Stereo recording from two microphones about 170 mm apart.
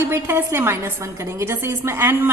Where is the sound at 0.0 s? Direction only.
15° right (ahead or behind).